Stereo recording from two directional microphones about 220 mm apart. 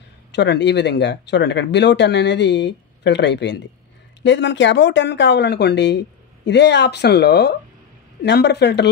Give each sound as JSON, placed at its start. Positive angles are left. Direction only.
{"t": 0.3, "sound": "speech", "side_deg": 50}